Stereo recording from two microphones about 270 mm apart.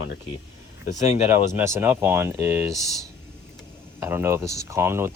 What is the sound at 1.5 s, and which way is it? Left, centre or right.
Speech, centre.